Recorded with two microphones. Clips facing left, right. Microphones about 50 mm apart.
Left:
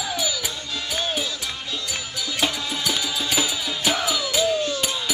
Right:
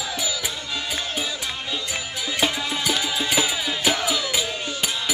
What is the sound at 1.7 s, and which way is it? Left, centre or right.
Music, centre.